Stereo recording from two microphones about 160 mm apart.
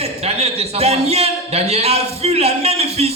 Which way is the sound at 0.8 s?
40° right (ahead or behind).